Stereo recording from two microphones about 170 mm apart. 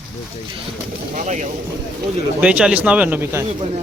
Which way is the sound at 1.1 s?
45° right (ahead or behind).